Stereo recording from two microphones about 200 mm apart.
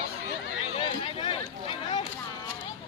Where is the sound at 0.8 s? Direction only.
25° left (ahead or behind).